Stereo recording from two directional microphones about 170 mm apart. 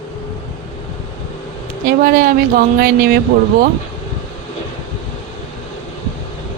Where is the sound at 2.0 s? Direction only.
60° right (ahead or behind).